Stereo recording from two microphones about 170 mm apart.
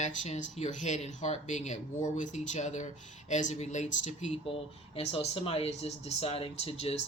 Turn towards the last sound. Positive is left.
turn(degrees=35)  # may be behind; listen again after turning